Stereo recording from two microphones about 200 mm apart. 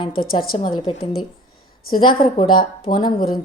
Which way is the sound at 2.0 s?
25° left (ahead or behind).